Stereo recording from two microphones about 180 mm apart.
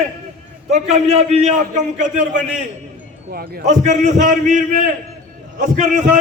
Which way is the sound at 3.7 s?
40° right (ahead or behind).